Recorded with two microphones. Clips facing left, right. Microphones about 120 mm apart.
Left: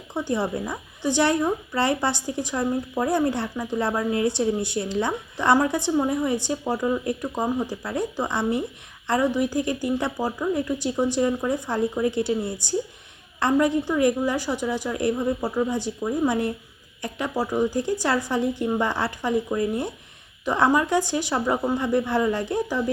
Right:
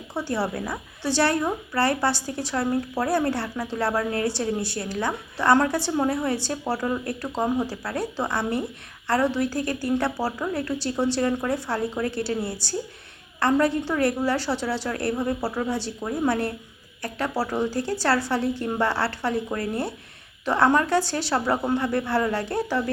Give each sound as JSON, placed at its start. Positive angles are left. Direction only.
{"t": 0.1, "sound": "a woman's voice", "side_deg": 20}